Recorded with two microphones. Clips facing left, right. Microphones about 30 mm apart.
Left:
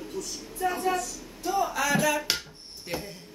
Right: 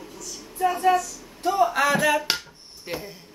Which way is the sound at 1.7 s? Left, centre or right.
Right.